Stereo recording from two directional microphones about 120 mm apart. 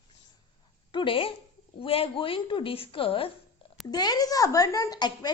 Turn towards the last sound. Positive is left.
turn(degrees=35)  # may be behind; listen again after turning